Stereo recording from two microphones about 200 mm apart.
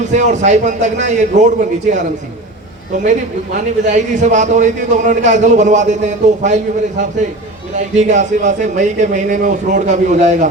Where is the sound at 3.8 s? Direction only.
35° right (ahead or behind).